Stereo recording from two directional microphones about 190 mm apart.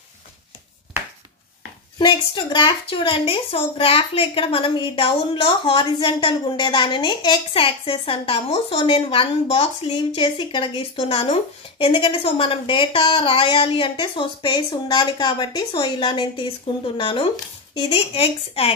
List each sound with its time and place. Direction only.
2.0 s a woman's voice: 25° left (ahead or behind)